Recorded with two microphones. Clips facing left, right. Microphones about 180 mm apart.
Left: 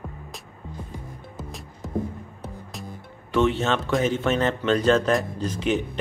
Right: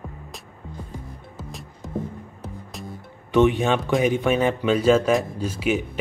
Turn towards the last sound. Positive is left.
turn(degrees=-10)  # may be behind; listen again after turning